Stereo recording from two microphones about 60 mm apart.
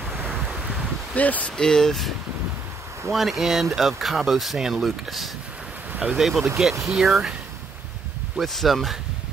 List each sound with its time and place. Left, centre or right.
0.1 s wind: right
0.4 s wind: centre
1.1 s speech: left
1.6 s speech: centre
8.4 s speech: centre